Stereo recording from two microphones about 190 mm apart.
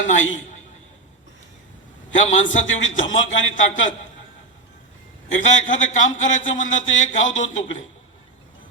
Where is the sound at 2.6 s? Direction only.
85° left.